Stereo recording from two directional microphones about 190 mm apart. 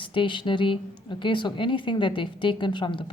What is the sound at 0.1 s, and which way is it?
Speech, 25° left (ahead or behind).